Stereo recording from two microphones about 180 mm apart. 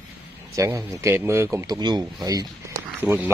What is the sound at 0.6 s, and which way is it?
Speech, 15° right (ahead or behind).